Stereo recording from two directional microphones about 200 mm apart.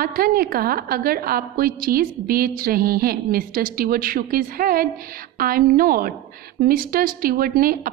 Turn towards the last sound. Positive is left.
turn(degrees=-45)  # may be behind; listen again after turning